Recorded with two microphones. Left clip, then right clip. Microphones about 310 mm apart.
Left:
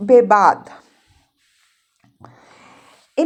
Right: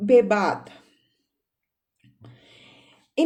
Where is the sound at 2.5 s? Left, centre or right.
Centre.